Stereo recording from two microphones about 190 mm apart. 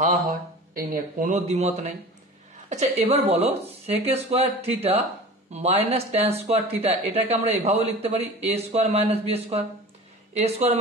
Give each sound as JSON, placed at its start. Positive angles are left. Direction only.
{"t": 0.0, "sound": "a man's voice", "side_deg": -50}